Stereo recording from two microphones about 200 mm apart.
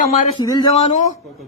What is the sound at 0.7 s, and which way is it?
Speech, 35° left (ahead or behind).